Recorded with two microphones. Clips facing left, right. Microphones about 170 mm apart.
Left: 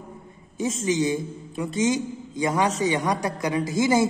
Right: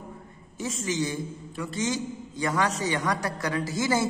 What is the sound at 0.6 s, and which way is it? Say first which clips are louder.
A man's voice: left 5 dB; 20° left (ahead or behind).